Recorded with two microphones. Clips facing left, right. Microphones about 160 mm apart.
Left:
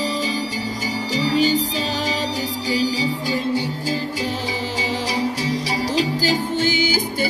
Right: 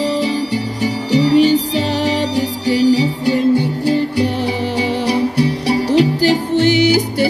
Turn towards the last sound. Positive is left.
turn(degrees=-70)  # may be behind; listen again after turning